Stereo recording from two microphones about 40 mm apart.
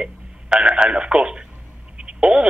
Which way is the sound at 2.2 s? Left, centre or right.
Right.